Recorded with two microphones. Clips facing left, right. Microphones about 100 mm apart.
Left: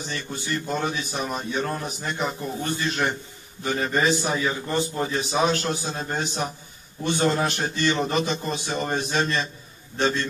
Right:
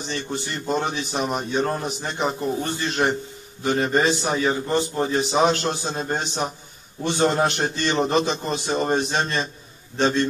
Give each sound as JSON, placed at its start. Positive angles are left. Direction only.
{"t": 0.1, "sound": "a man's voice", "side_deg": -25}